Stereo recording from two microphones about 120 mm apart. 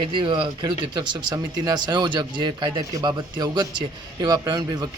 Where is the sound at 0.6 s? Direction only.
30° right (ahead or behind).